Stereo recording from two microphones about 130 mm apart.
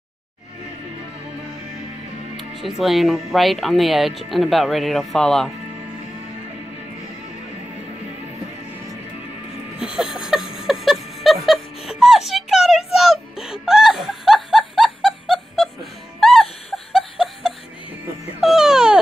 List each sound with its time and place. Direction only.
2.3 s speech: centre (ahead or behind)
9.8 s a sound: 5° right (ahead or behind)
10.7 s music: centre (ahead or behind)
18.4 s baby cry: 5° right (ahead or behind)